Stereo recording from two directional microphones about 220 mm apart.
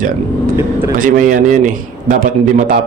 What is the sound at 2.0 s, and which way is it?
Speech, 40° right (ahead or behind).